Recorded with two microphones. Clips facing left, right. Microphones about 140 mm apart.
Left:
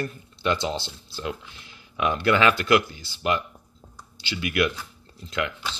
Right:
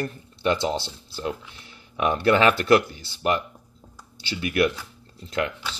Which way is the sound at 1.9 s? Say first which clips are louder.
Right 2 dB; 25° right (ahead or behind).